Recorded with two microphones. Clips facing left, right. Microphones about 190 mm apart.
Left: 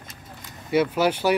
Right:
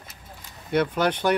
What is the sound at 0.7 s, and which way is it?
Speech, 5° left (ahead or behind).